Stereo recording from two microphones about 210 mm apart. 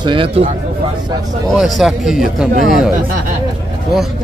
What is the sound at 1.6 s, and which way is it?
Speech, centre (ahead or behind).